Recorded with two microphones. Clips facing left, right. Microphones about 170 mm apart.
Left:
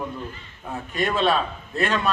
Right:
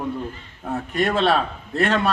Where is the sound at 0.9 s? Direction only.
70° right (ahead or behind).